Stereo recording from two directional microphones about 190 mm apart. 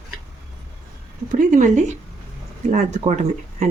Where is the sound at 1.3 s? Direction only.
45° right (ahead or behind).